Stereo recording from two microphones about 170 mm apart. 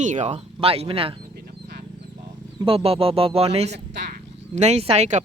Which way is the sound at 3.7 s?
85° right.